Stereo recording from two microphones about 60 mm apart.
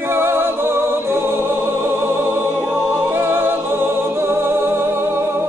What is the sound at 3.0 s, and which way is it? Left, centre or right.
Music, right.